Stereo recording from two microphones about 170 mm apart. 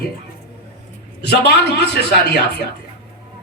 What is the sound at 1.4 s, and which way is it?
Speech, 75° left (ahead or behind).